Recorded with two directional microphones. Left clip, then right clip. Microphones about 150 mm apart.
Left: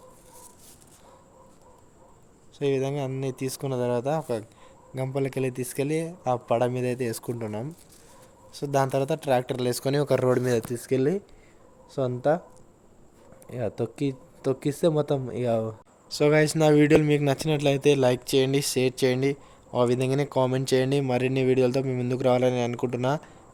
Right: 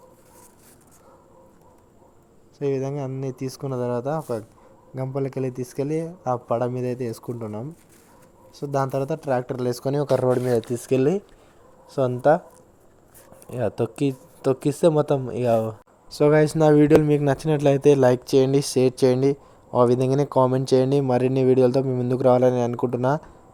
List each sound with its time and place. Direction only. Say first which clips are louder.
2.6 s speech: right 1 dB; 5° right (ahead or behind)
10.2 s speech: right 2 dB; 20° left (ahead or behind)
10.5 s speech: right 4 dB; 10° right (ahead or behind)
13.5 s speech: right 5 dB; 20° right (ahead or behind)
16.0 s speech: right 3 dB; 20° right (ahead or behind)